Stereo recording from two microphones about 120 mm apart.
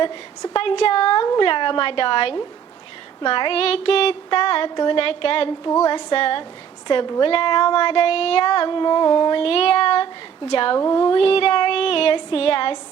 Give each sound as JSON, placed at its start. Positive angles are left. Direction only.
{"t": 0.0, "sound": "child singing", "side_deg": 40}
{"t": 6.8, "sound": "a woman's voice", "side_deg": 35}
{"t": 7.3, "sound": "child singing", "side_deg": 50}